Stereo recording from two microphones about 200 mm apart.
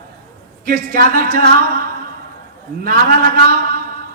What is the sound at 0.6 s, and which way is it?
Speech, 45° right (ahead or behind).